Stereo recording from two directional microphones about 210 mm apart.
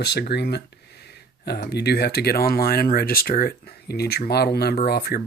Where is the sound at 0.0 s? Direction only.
50° left (ahead or behind).